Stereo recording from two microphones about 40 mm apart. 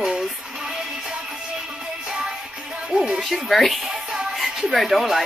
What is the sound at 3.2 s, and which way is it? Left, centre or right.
Speech, centre.